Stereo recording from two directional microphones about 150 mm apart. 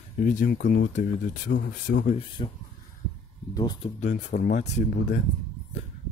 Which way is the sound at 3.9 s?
55° left (ahead or behind).